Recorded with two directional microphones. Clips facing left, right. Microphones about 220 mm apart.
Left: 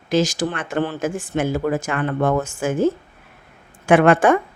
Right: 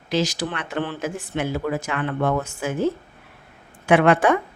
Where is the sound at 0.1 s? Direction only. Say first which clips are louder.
Left 4 dB; 45° left (ahead or behind).